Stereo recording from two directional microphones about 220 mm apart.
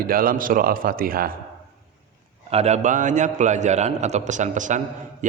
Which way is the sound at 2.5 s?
30° right (ahead or behind).